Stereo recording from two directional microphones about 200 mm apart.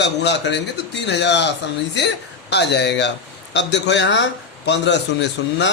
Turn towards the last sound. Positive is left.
turn(degrees=65)  # may be behind; listen again after turning